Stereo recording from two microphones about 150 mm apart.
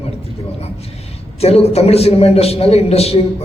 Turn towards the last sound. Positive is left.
turn(degrees=45)  # may be behind; listen again after turning